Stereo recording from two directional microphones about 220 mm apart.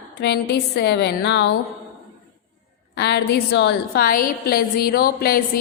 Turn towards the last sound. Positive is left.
turn(degrees=45)  # may be behind; listen again after turning